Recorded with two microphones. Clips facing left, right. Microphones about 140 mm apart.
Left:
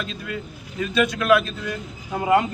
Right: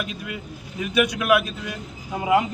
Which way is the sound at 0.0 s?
15° right (ahead or behind).